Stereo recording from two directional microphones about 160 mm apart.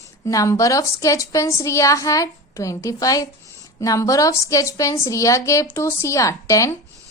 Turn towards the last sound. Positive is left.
turn(degrees=20)  # may be behind; listen again after turning